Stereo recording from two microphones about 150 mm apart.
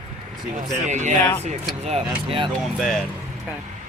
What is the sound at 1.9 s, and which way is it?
Speech, 40° right (ahead or behind).